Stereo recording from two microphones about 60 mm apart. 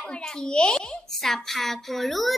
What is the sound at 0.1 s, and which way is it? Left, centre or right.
A child's voice, centre.